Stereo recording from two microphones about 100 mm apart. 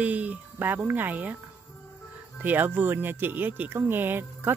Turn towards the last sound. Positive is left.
turn(degrees=-20)  # may be behind; listen again after turning